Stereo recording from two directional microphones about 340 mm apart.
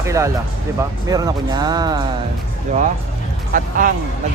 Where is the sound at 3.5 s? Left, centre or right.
Right.